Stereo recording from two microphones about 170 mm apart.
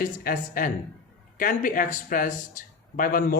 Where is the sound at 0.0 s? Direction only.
55° left (ahead or behind).